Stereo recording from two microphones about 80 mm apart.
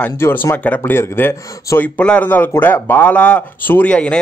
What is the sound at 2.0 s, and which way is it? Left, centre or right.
Speech, centre.